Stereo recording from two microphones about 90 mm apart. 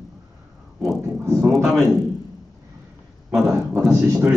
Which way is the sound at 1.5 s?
Centre (ahead or behind).